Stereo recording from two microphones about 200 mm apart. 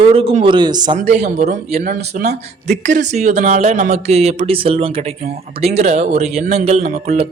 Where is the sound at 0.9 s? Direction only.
35° right (ahead or behind).